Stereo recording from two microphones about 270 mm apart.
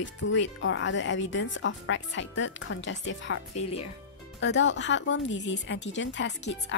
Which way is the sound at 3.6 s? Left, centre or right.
Left.